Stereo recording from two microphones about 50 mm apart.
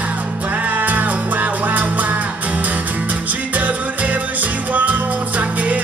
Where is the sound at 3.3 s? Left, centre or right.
Right.